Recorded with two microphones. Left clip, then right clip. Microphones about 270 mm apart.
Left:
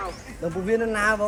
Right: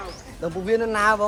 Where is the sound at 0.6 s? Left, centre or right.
Centre.